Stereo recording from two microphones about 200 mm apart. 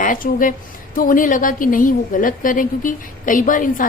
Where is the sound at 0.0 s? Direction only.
40° left (ahead or behind).